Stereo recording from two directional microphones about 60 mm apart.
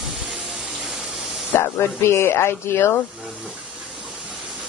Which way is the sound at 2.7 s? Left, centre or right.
Left.